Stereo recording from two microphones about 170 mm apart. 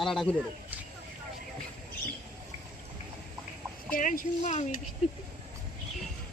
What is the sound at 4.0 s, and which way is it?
Speech, 50° left (ahead or behind).